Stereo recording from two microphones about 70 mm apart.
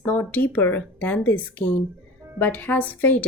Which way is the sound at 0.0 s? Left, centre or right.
Left.